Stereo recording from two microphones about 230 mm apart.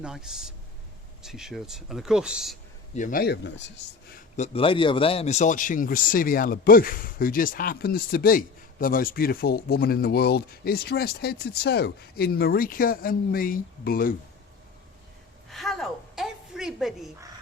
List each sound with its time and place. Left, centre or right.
0.0 s speech: centre
2.9 s a man's voice: left
4.1 s a man's voice: left
15.4 s a sound: centre